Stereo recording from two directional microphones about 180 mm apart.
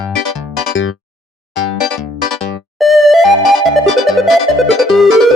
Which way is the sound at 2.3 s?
Centre (ahead or behind).